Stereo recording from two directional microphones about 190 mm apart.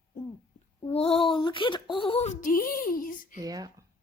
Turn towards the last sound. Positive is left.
turn(degrees=-20)  # may be behind; listen again after turning